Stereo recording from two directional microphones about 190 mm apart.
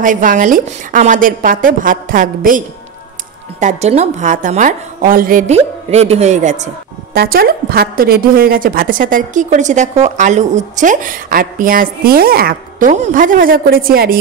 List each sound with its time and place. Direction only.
0.0 s a woman's voice: 45° right (ahead or behind)
5.5 s a woman's voice: 35° right (ahead or behind)
7.2 s a woman's voice: 50° right (ahead or behind)